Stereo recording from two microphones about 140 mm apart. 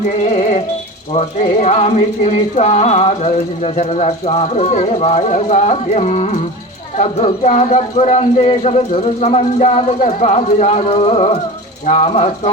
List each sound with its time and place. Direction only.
0.2 s music: 50° left (ahead or behind)